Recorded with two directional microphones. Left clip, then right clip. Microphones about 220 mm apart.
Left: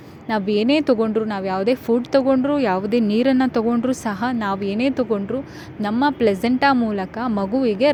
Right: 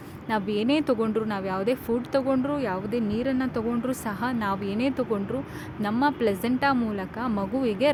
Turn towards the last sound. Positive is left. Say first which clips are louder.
# left 6 dB
turn(degrees=20)  # may be behind; listen again after turning